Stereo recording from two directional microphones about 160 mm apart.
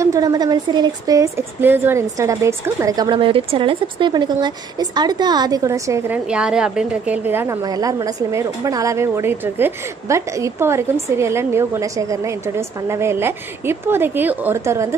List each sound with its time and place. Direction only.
0.0 s a woman's voice: 20° right (ahead or behind)